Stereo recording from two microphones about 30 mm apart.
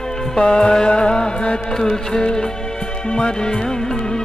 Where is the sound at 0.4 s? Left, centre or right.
Left.